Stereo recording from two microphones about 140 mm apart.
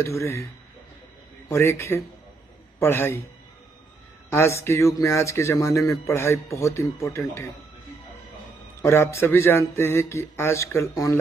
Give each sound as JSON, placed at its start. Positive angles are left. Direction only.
{"t": 0.0, "sound": "a man's voice", "side_deg": 20}
{"t": 1.5, "sound": "a man's voice", "side_deg": 20}
{"t": 4.3, "sound": "a man's voice", "side_deg": 20}
{"t": 8.8, "sound": "a man's voice", "side_deg": 20}